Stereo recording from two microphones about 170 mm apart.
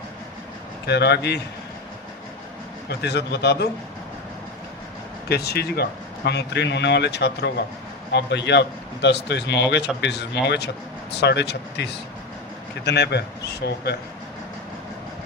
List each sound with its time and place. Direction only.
0.9 s speech: 80° left
3.0 s speech: 80° left
5.3 s speech: 70° left (ahead or behind)
8.1 s a man's voice: 90° left
11.1 s speech: 80° left